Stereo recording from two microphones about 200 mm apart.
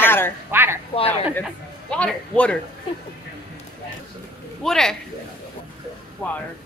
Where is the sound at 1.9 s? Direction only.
5° left (ahead or behind).